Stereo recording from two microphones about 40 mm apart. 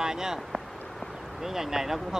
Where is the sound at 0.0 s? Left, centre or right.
Centre.